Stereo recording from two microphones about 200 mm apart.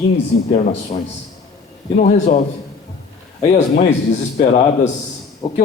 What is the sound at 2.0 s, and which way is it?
Speech, 35° left (ahead or behind).